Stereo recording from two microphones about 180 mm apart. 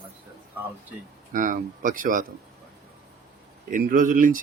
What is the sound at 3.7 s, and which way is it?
Speech, 50° right (ahead or behind).